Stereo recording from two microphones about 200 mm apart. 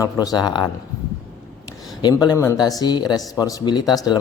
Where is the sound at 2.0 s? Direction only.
20° left (ahead or behind).